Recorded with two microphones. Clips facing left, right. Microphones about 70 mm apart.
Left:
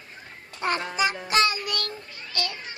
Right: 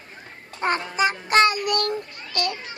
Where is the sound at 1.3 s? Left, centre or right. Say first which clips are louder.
Right 8 dB; right.